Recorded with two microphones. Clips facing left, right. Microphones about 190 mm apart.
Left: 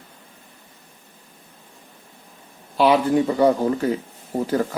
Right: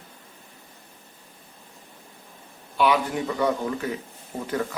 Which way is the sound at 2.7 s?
35° left (ahead or behind).